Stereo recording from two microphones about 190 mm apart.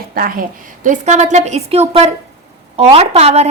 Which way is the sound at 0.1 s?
50° right (ahead or behind).